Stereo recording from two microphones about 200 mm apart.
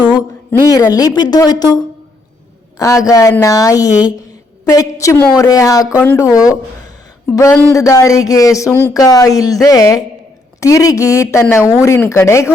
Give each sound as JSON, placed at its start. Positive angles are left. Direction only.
{"t": 0.9, "sound": "speech", "side_deg": 20}